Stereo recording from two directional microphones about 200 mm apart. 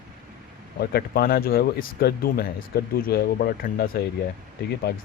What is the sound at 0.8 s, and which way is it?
Speech, 50° left (ahead or behind).